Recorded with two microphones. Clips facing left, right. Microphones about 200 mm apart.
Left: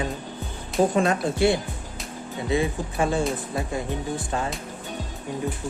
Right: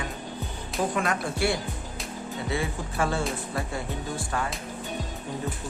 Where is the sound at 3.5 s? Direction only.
20° left (ahead or behind).